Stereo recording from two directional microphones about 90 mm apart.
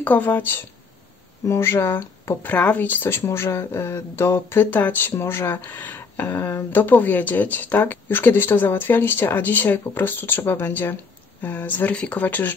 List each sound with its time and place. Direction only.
0.0 s speech: 20° left (ahead or behind)